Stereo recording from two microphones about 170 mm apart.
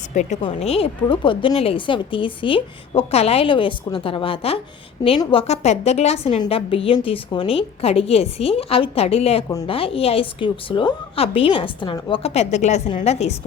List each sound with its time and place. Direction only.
0.1 s a woman's voice: 45° left (ahead or behind)